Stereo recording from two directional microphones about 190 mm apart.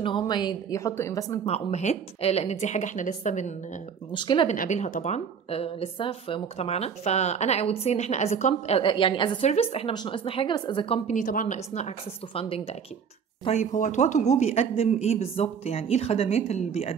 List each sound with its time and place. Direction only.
0.0 s a woman's voice: 25° left (ahead or behind)
1.4 s speech: 35° left (ahead or behind)
4.1 s a woman's voice: 25° left (ahead or behind)
4.5 s a woman's voice: 40° left (ahead or behind)
11.1 s speech: 45° left (ahead or behind)